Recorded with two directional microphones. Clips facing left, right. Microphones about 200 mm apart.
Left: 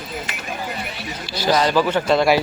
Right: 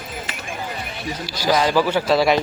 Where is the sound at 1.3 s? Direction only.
10° right (ahead or behind).